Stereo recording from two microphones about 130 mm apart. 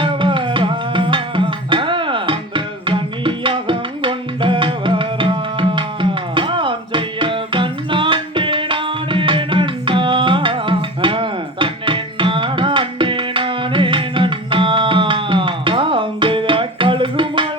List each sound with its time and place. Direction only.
0.0 s music: 40° right (ahead or behind)